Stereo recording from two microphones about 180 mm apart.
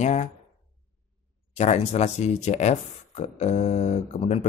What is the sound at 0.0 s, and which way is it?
Speech, 40° left (ahead or behind).